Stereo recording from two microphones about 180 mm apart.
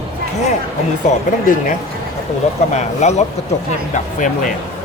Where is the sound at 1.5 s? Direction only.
45° left (ahead or behind).